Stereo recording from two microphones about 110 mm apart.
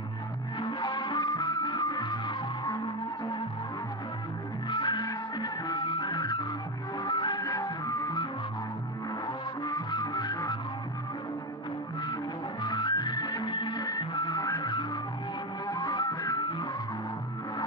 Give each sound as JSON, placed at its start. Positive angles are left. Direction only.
{"t": 0.6, "sound": "music", "side_deg": 45}
{"t": 4.6, "sound": "music", "side_deg": 45}
{"t": 9.7, "sound": "music", "side_deg": 40}
{"t": 12.6, "sound": "music", "side_deg": 40}